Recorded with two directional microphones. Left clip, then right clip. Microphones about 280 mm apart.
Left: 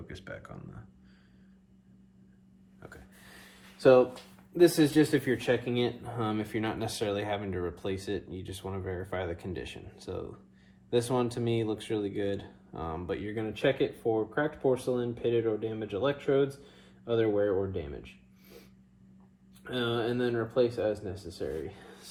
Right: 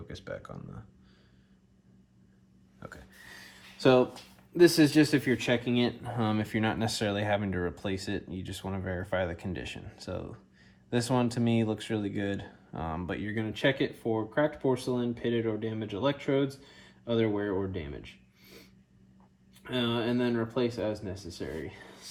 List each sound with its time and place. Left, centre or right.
0.1 s speech: centre
4.9 s speech: right
19.6 s speech: right